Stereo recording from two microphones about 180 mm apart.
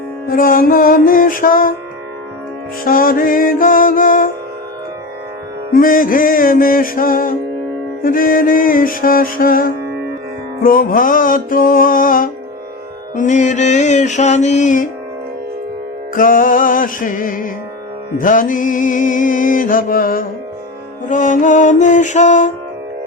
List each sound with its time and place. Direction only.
0.3 s music: 50° left (ahead or behind)
2.8 s music: 50° left (ahead or behind)
5.7 s music: 50° left (ahead or behind)
16.1 s music: 50° left (ahead or behind)